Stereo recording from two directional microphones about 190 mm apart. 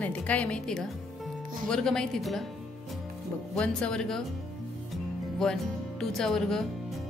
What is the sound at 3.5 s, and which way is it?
Speech, 5° left (ahead or behind).